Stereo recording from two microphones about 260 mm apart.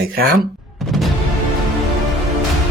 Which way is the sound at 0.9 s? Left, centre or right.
Centre.